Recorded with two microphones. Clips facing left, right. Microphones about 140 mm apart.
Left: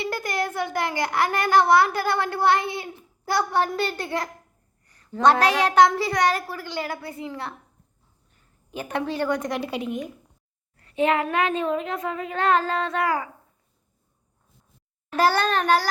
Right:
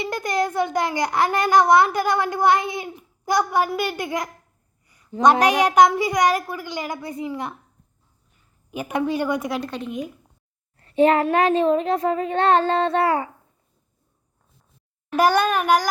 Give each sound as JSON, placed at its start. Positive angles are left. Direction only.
{"t": 0.0, "sound": "a child's voice", "side_deg": -20}
{"t": 8.7, "sound": "a child's voice", "side_deg": -15}
{"t": 9.6, "sound": "a woman's voice", "side_deg": 10}
{"t": 10.8, "sound": "a child's voice", "side_deg": -35}
{"t": 15.1, "sound": "a child's voice", "side_deg": -15}